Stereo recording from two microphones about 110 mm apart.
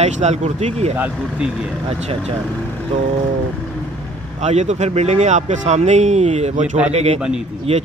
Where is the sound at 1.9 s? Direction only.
70° right (ahead or behind).